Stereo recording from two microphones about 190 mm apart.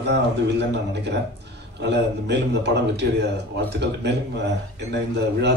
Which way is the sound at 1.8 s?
65° right (ahead or behind).